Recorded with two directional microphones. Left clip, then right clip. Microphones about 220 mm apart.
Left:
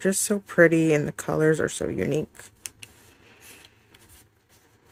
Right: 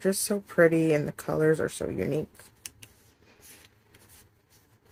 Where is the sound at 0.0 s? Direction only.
40° left (ahead or behind).